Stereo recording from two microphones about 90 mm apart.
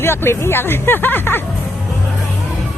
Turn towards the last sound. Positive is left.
turn(degrees=20)  # may be behind; listen again after turning